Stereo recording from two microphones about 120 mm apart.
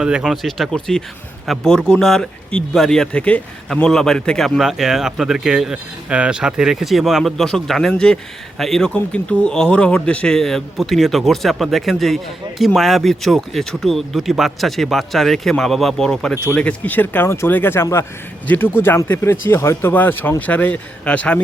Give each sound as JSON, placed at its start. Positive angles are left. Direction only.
{"t": 0.0, "sound": "speech", "side_deg": -5}